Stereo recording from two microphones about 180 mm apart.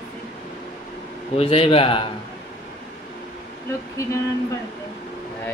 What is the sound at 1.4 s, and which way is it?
Speech, 30° left (ahead or behind).